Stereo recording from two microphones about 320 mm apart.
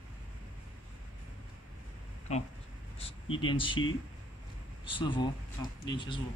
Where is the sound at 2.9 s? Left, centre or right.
Centre.